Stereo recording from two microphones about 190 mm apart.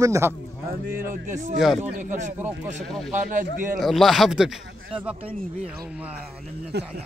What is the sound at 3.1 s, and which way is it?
Speech, 45° right (ahead or behind).